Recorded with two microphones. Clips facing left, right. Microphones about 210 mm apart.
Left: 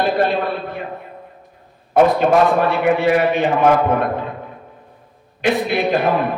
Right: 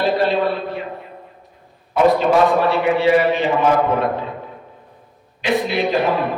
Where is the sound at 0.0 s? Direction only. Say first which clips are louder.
Even; 55° left (ahead or behind).